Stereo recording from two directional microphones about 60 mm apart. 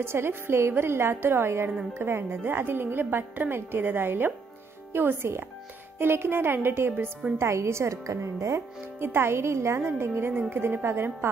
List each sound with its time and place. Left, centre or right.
0.0 s a woman's voice: right
9.0 s a woman's voice: right